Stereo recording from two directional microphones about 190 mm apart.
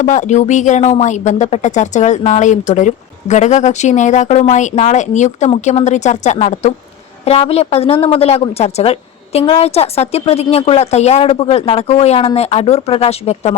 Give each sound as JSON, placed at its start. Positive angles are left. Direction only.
{"t": 0.0, "sound": "speech", "side_deg": 40}